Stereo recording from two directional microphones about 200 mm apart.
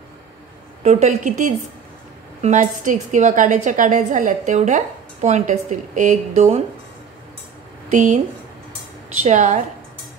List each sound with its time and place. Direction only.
0.8 s a woman's voice: 35° right (ahead or behind)
7.9 s a woman's voice: 40° right (ahead or behind)
9.2 s a woman's voice: 35° right (ahead or behind)